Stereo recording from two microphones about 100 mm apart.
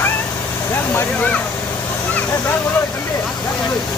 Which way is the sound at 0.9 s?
15° left (ahead or behind).